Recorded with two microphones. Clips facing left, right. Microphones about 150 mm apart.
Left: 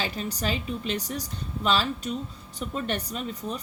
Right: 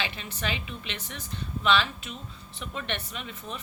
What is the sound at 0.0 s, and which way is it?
A woman's voice, 40° left (ahead or behind).